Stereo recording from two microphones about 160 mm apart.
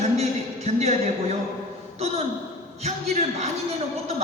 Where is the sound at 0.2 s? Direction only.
40° right (ahead or behind).